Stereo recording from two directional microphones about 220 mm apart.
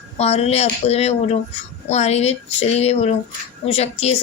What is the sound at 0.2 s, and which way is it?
A man's voice, 30° left (ahead or behind).